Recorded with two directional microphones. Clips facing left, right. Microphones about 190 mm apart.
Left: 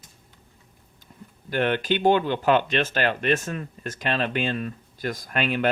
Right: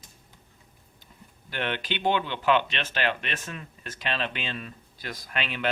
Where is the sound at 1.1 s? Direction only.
45° left (ahead or behind).